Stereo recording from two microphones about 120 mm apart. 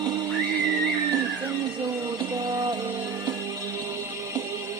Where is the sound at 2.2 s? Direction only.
30° right (ahead or behind).